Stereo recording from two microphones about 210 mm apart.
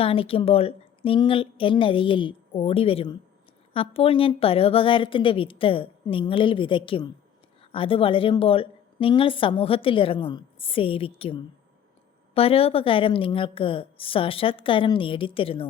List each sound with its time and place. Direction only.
0.0 s a woman's voice: 25° left (ahead or behind)